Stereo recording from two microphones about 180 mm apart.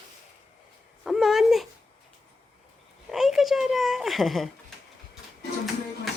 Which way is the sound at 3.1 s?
Centre (ahead or behind).